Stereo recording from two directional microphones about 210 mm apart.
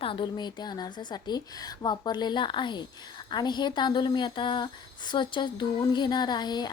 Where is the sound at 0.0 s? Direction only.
25° left (ahead or behind).